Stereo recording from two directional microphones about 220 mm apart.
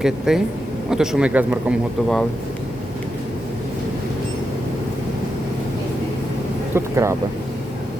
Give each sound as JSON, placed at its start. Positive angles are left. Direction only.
{"t": 0.0, "sound": "speech", "side_deg": 0}
{"t": 6.7, "sound": "speech", "side_deg": -10}